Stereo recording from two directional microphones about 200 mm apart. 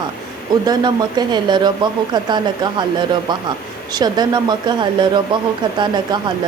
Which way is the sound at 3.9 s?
20° right (ahead or behind).